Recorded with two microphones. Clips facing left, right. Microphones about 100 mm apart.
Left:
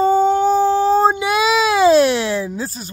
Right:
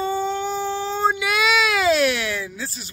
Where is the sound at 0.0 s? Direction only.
45° left (ahead or behind).